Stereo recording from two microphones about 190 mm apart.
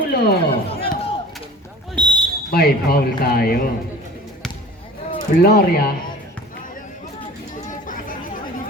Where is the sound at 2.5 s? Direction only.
55° left (ahead or behind).